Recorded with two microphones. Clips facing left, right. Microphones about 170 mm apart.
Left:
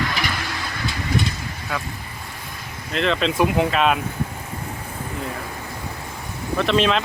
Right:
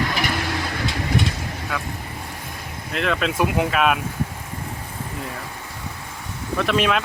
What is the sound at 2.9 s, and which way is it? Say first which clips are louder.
Speech: left 2 dB; 5° right (ahead or behind).